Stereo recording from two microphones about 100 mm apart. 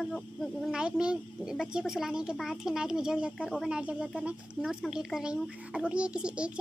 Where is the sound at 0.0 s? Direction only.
5° left (ahead or behind).